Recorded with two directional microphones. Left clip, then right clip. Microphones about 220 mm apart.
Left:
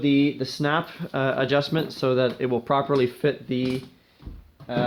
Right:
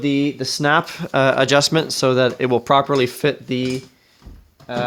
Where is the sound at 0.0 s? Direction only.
40° right (ahead or behind).